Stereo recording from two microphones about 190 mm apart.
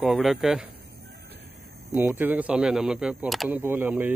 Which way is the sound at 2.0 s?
10° right (ahead or behind).